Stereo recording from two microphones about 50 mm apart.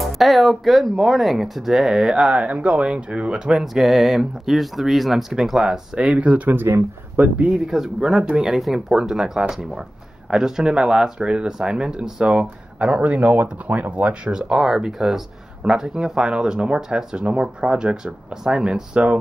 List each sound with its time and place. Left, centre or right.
0.0 s speech: centre
2.3 s speech: right
3.5 s speech: centre
5.9 s speech: right
6.5 s speech: right
7.5 s speech: centre
8.5 s speech: centre; by 19.1 s right